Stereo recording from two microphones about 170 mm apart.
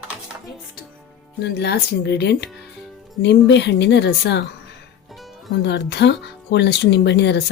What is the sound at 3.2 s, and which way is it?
A woman's voice, 90° left.